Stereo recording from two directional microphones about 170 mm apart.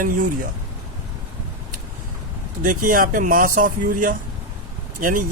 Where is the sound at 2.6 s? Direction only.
55° right (ahead or behind).